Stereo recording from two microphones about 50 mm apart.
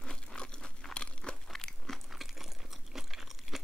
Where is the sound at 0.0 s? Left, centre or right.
Centre.